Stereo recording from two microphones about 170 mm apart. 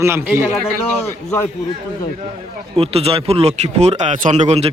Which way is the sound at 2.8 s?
35° right (ahead or behind).